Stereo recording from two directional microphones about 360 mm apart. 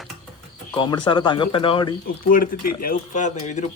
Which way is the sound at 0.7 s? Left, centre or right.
Centre.